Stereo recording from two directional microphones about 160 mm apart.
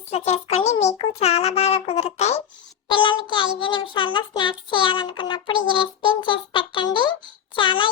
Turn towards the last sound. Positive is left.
turn(degrees=30)  # may be behind; listen again after turning